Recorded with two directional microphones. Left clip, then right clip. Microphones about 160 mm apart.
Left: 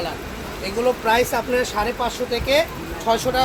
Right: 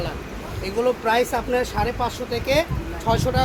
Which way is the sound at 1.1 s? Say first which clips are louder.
Left 2 dB; 30° right (ahead or behind).